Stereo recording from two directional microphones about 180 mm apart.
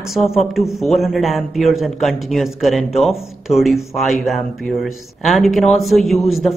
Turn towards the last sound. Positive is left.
turn(degrees=0)  # may be behind; listen again after turning